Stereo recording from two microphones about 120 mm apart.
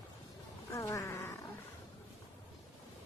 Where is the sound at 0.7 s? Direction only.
25° left (ahead or behind).